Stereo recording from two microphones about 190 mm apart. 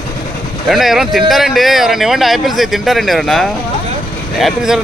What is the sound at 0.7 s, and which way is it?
Speech, centre (ahead or behind).